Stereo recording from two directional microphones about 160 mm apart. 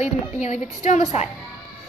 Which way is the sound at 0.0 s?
45° left (ahead or behind).